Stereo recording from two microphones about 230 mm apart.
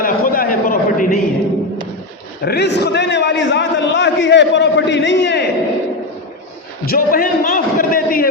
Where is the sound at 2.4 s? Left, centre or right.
Left.